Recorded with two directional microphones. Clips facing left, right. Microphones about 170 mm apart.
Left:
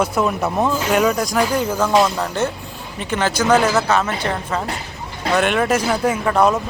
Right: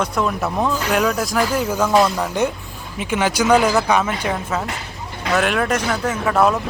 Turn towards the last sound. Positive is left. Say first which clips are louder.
# left 1 dB
turn(degrees=0)  # may be behind; listen again after turning